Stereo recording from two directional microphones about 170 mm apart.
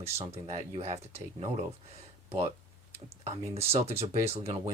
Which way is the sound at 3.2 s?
40° right (ahead or behind).